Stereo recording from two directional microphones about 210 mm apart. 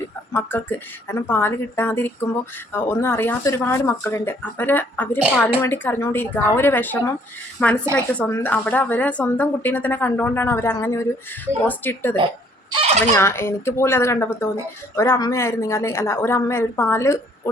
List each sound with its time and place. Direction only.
0.3 s speech: 10° left (ahead or behind)
12.7 s fowl: 30° right (ahead or behind)
13.1 s speech: 10° left (ahead or behind)